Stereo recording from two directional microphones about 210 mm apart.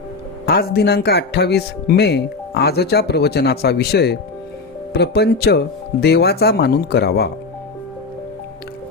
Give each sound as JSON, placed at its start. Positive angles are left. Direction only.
{"t": 0.4, "sound": "speech", "side_deg": 50}